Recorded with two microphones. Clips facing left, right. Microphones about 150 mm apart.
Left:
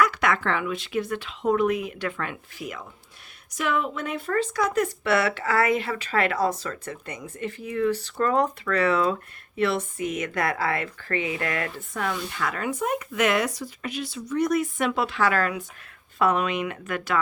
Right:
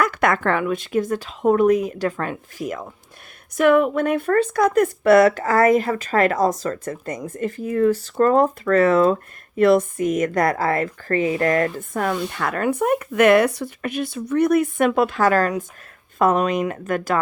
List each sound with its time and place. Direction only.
0.0 s speech: 50° right (ahead or behind)
3.6 s speech: 55° right (ahead or behind)